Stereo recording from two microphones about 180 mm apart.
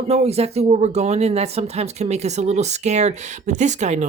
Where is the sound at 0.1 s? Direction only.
35° right (ahead or behind).